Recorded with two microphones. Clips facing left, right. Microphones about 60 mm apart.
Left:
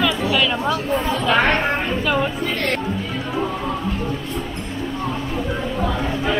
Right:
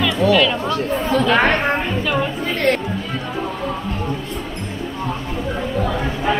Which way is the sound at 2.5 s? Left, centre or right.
Right.